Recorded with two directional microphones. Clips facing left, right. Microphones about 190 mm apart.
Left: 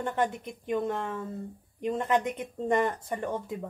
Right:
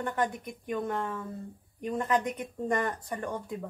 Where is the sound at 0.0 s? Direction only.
25° left (ahead or behind).